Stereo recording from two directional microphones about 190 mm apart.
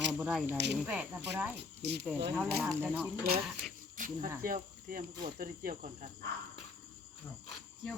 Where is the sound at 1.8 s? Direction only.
60° right (ahead or behind).